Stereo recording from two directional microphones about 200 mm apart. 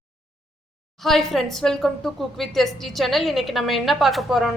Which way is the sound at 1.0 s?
Centre (ahead or behind).